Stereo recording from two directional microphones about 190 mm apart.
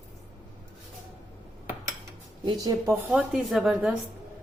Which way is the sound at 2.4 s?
20° right (ahead or behind).